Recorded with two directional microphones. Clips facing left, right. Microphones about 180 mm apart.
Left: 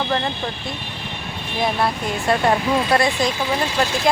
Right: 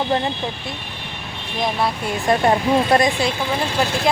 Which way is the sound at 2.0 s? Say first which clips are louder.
Right 2 dB; 15° right (ahead or behind).